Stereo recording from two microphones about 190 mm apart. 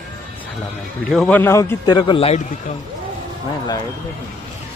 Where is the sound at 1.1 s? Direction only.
5° left (ahead or behind); by 2.4 s 30° left (ahead or behind).